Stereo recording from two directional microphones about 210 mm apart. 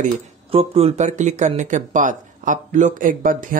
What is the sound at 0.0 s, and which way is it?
Speech, 25° right (ahead or behind).